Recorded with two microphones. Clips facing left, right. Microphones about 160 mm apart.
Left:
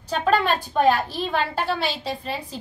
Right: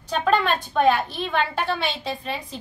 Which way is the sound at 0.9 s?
35° left (ahead or behind).